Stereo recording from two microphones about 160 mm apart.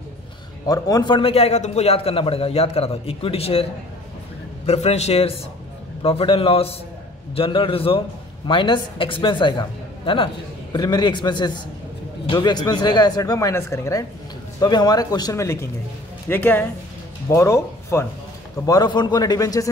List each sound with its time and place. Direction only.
0.7 s a man's voice: 20° left (ahead or behind); by 3.6 s 40° left (ahead or behind)
4.6 s a man's voice: 40° left (ahead or behind); by 19.7 s 20° left (ahead or behind)